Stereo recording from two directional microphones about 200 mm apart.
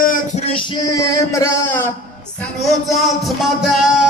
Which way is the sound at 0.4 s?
25° left (ahead or behind).